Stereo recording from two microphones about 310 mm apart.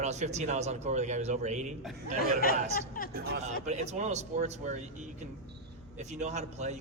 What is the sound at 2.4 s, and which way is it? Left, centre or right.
Speech, left.